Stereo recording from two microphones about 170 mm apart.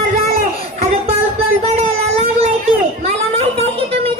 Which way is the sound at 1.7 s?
40° right (ahead or behind).